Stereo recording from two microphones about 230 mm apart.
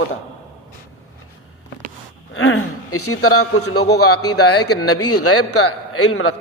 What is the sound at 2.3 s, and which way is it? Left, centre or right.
A man's voice, left.